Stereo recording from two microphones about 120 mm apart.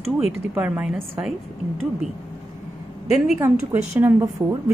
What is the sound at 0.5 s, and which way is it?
Speech, 10° right (ahead or behind).